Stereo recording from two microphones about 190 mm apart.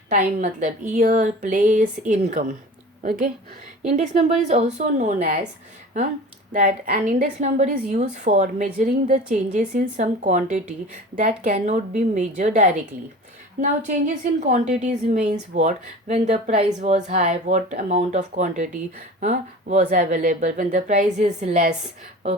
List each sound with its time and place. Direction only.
0.1 s a woman's voice: 40° right (ahead or behind)
6.5 s a woman's voice: 40° right (ahead or behind)